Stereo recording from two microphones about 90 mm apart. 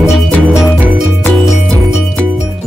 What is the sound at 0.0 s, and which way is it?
Music, 5° right (ahead or behind).